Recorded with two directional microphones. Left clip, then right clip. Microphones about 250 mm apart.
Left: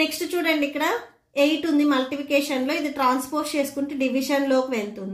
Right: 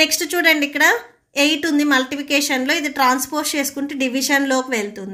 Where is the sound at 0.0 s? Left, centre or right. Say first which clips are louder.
Right 7 dB; right.